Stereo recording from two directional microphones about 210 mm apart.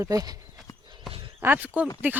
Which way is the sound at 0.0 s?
15° right (ahead or behind).